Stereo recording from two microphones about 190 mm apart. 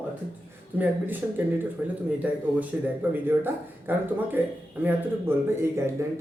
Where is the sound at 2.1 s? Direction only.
10° right (ahead or behind).